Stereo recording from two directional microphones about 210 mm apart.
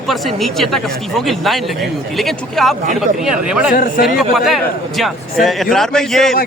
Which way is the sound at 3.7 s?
40° left (ahead or behind).